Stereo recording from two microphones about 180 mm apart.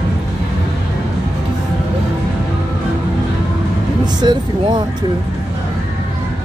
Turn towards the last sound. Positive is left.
turn(degrees=-25)  # may be behind; listen again after turning